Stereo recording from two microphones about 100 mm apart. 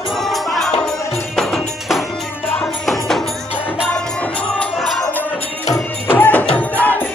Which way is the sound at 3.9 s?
10° left (ahead or behind).